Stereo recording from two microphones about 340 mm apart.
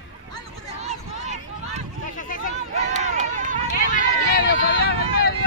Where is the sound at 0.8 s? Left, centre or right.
Centre.